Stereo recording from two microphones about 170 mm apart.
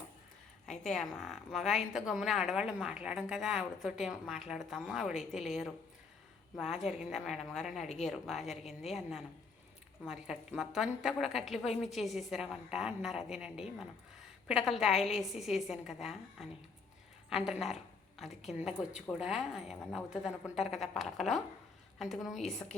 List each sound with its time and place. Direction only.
0.7 s a woman's voice: 5° left (ahead or behind)